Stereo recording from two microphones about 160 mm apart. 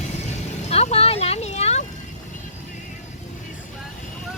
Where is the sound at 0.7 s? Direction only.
40° left (ahead or behind).